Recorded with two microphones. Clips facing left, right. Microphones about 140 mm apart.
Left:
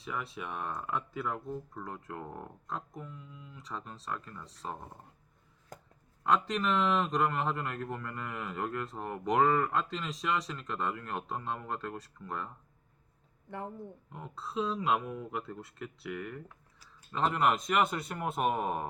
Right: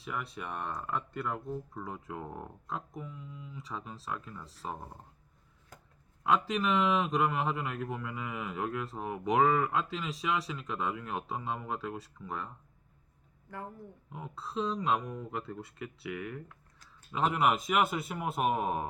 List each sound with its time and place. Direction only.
0.0 s speech: centre (ahead or behind)
5.7 s chopping: 45° left (ahead or behind)
6.2 s speech: centre (ahead or behind)
14.1 s speech: centre (ahead or behind)